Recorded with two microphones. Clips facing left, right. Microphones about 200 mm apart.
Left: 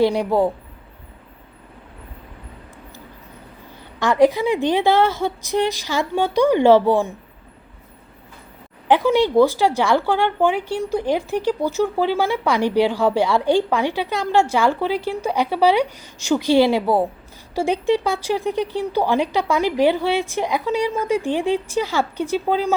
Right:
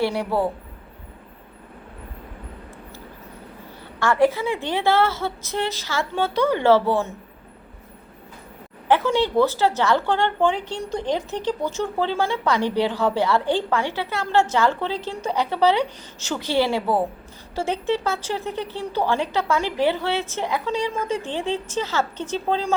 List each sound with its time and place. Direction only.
0.0 s a woman's voice: 15° left (ahead or behind)
4.0 s a woman's voice: 15° left (ahead or behind)
8.9 s a woman's voice: 15° left (ahead or behind)